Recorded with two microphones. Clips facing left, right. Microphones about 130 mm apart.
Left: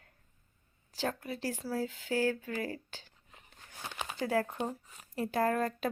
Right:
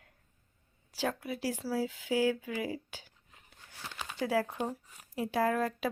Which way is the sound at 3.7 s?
20° left (ahead or behind).